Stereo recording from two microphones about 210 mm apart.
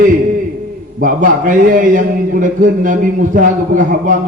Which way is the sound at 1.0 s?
40° right (ahead or behind).